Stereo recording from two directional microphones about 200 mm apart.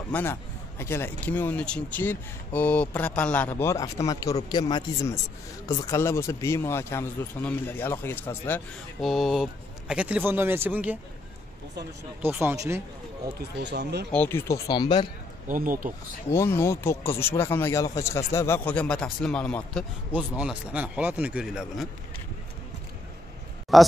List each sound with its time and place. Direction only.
0.1 s a man's voice: 10° left (ahead or behind); by 11.0 s 10° right (ahead or behind)
12.2 s speech: 10° right (ahead or behind)
13.4 s speech: 55° right (ahead or behind)
14.1 s a man's voice: 10° left (ahead or behind)
15.4 s speech: 40° right (ahead or behind)
16.3 s a man's voice: 10° left (ahead or behind)
20.1 s speech: 5° right (ahead or behind)
23.7 s speech: centre (ahead or behind)